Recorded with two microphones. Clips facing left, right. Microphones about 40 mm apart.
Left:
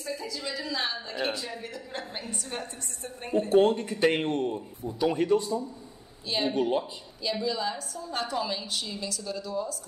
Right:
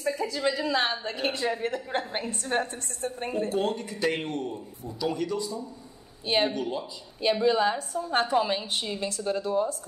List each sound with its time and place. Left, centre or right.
0.0 s a woman's voice: right
3.4 s a man's voice: left
6.2 s a woman's voice: right
6.5 s speech: left
7.4 s a woman's voice: right